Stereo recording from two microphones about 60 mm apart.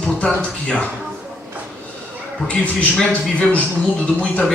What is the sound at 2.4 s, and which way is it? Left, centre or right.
A man's voice, left.